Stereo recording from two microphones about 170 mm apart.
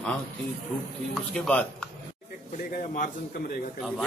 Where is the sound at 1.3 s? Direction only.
5° left (ahead or behind).